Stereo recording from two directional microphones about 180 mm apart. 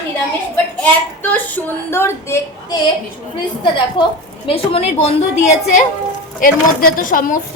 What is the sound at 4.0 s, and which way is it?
A woman's voice, 25° left (ahead or behind).